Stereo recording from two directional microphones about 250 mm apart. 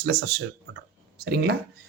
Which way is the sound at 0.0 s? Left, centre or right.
Right.